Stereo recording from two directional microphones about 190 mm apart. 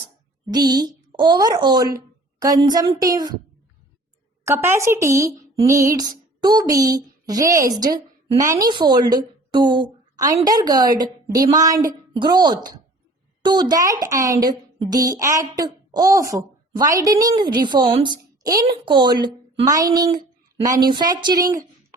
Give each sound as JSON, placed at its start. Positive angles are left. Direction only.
{"t": 0.8, "sound": "a child's voice", "side_deg": -25}
{"t": 4.4, "sound": "a woman's voice", "side_deg": -15}